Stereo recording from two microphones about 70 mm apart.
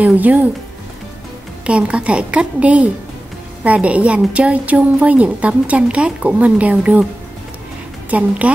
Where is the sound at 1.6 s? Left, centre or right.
Centre.